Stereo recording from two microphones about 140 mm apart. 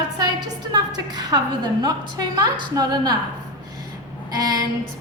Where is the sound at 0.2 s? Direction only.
30° right (ahead or behind).